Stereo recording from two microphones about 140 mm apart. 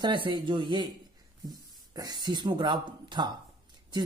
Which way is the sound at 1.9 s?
30° right (ahead or behind).